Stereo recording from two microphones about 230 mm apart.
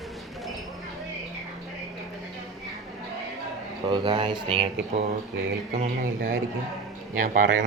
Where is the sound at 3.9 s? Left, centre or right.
Right.